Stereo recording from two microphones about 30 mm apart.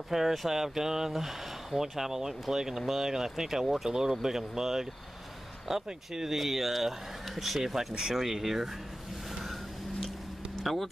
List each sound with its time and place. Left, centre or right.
0.1 s speech: centre
9.3 s vehicle: centre
10.0 s a sound: centre